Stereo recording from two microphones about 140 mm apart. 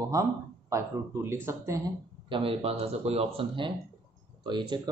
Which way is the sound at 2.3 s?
40° right (ahead or behind).